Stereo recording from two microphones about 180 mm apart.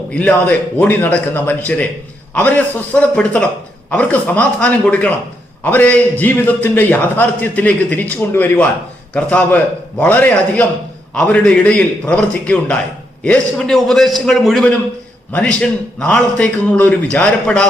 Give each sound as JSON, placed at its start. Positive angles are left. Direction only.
{"t": 0.1, "sound": "a man's voice", "side_deg": 5}